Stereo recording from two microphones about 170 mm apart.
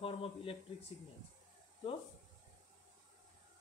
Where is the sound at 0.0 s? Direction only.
30° left (ahead or behind).